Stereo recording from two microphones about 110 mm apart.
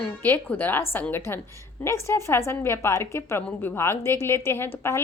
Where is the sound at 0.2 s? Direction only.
15° left (ahead or behind).